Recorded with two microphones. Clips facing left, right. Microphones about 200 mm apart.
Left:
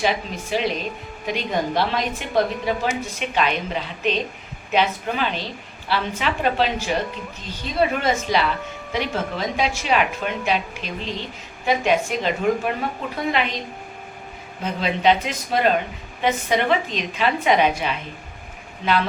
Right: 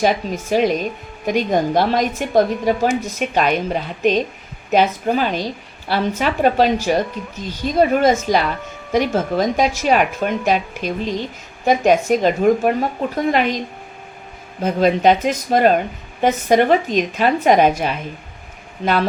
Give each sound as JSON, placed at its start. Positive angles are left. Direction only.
{"t": 0.0, "sound": "a woman's voice", "side_deg": -45}
{"t": 14.6, "sound": "a woman's voice", "side_deg": -45}